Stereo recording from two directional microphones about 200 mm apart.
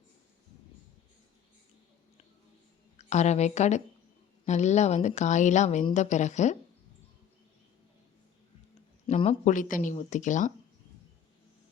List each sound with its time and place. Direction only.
3.0 s a woman's voice: 35° left (ahead or behind)
9.0 s speech: 30° left (ahead or behind)